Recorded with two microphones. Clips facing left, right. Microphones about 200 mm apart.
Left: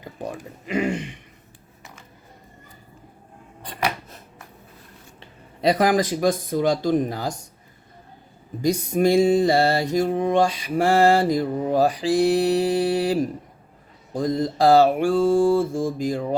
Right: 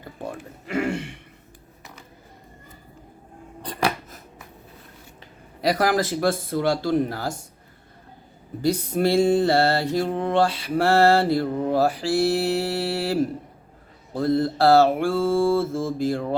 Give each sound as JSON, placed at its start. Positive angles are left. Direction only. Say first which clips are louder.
{"t": 0.0, "sound": "mantra", "louder": "left 2 dB", "side_deg": 15}
{"t": 5.2, "sound": "speech", "louder": "left 3 dB", "side_deg": 25}
{"t": 8.6, "sound": "mantra", "louder": "left 2 dB", "side_deg": 15}